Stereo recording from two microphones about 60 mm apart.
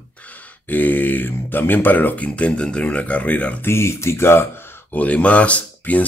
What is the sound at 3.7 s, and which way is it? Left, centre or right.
Speech, left.